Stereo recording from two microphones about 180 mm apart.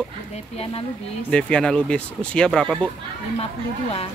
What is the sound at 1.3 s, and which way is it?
Speech, 5° left (ahead or behind).